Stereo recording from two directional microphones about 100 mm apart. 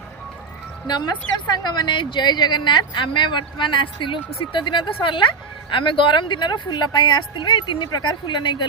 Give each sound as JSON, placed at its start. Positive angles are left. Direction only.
{"t": 0.9, "sound": "a woman's voice", "side_deg": 45}